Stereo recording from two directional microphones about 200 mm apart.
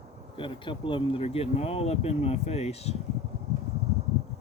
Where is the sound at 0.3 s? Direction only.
25° left (ahead or behind).